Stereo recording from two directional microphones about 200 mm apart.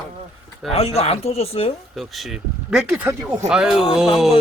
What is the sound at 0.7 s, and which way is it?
Speech, 30° left (ahead or behind).